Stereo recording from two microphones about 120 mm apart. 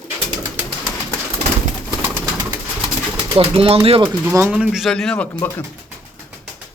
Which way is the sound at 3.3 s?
50° right (ahead or behind).